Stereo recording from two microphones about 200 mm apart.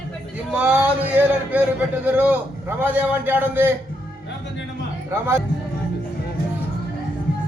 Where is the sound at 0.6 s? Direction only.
5° right (ahead or behind).